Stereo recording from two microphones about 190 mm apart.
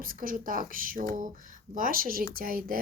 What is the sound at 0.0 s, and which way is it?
Speech, 45° right (ahead or behind).